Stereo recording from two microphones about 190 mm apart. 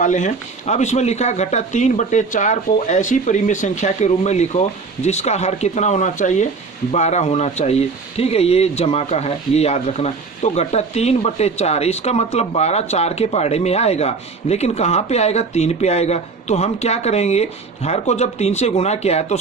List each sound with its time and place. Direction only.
0.0 s speech: 40° left (ahead or behind)